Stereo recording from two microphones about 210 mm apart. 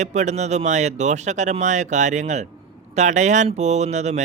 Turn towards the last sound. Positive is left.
turn(degrees=-35)  # may be behind; listen again after turning